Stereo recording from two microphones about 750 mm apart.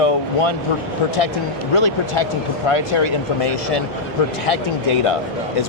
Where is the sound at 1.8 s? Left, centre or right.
Left.